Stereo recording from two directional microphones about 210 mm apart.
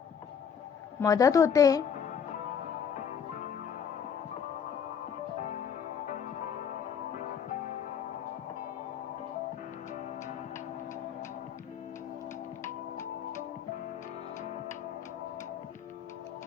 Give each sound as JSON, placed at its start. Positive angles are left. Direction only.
{"t": 0.9, "sound": "a woman's voice", "side_deg": 15}